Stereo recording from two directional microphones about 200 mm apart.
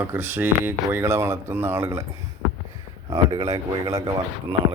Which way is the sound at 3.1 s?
20° right (ahead or behind).